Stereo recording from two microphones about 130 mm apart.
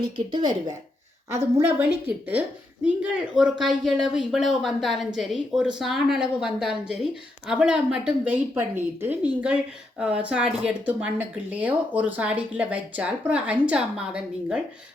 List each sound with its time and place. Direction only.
0.3 s speech: 35° right (ahead or behind)
1.6 s a woman's voice: 15° right (ahead or behind)